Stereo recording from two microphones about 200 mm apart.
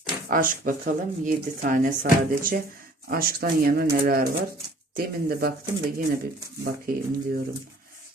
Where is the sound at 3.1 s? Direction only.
45° right (ahead or behind).